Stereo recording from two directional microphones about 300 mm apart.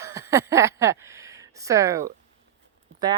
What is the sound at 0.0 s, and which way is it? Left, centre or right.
Speech, centre.